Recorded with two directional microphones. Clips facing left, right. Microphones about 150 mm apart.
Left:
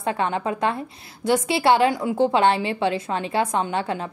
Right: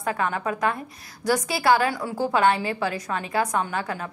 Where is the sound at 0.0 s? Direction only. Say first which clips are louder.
Left 2 dB; 25° left (ahead or behind).